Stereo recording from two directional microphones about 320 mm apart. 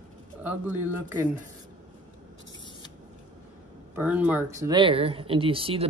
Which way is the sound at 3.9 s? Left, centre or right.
Centre.